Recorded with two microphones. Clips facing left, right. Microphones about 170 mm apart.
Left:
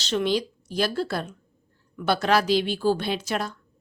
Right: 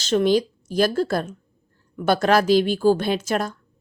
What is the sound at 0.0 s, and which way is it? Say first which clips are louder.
A woman's voice: right 6 dB; 45° right (ahead or behind).